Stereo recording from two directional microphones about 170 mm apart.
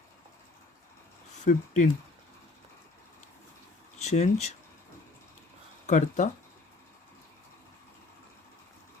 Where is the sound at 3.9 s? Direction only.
40° left (ahead or behind).